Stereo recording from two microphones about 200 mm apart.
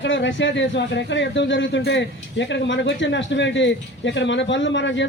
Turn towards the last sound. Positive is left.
turn(degrees=65)  # may be behind; listen again after turning